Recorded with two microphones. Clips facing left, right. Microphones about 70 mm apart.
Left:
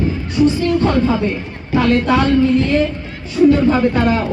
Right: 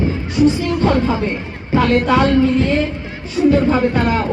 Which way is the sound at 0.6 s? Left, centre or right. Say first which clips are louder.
Left 1 dB; centre.